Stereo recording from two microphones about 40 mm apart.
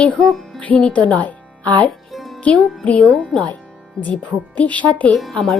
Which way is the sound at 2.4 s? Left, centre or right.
Left.